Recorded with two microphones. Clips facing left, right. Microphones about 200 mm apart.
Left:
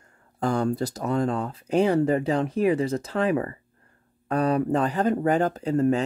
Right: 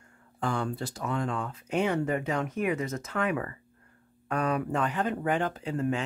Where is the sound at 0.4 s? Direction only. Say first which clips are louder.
Left 7 dB; 40° left (ahead or behind).